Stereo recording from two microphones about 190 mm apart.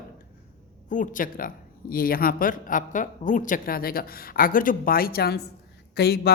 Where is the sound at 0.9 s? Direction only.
40° left (ahead or behind).